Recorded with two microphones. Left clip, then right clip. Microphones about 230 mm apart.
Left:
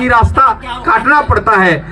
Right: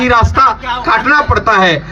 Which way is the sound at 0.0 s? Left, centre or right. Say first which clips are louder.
Even; right.